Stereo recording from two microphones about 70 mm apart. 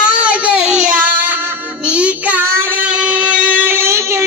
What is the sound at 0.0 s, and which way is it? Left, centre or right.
Baby cry, centre.